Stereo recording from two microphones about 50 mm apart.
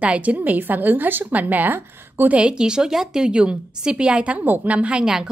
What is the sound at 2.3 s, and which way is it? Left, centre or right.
Speech, centre.